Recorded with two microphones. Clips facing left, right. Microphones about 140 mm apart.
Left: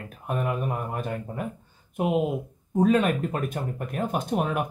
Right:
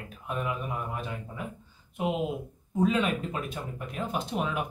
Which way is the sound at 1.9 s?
50° left (ahead or behind).